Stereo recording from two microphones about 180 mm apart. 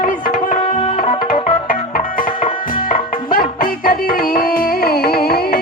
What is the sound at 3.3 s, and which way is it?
Music, 55° left (ahead or behind).